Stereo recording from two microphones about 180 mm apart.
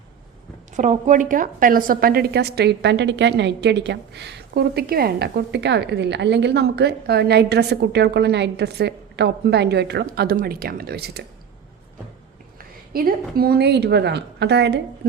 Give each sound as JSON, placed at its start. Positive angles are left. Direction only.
{"t": 0.8, "sound": "a woman's voice", "side_deg": -45}
{"t": 12.5, "sound": "a woman's voice", "side_deg": -55}